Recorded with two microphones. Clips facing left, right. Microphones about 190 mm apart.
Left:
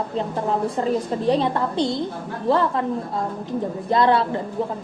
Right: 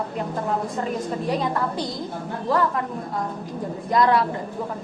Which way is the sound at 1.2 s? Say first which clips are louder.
Left 4 dB; 30° left (ahead or behind).